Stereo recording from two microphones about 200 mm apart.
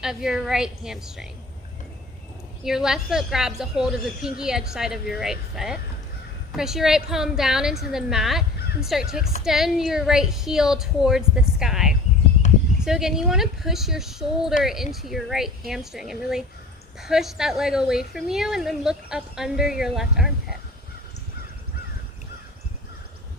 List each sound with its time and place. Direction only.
0.0 s a woman's voice: 5° right (ahead or behind)
2.6 s a woman's voice: centre (ahead or behind)